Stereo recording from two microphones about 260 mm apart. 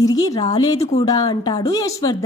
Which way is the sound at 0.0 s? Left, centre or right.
Centre.